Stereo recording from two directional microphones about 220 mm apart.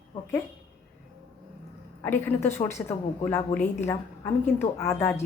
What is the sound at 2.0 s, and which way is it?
A woman's voice, 10° left (ahead or behind).